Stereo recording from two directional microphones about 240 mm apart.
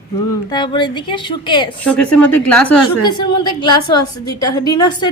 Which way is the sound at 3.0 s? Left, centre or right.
Centre.